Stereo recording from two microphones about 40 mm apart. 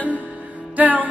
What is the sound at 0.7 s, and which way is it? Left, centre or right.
Music, right.